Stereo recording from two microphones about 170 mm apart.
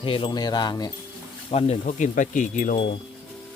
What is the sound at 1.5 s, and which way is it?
Speech, 35° left (ahead or behind).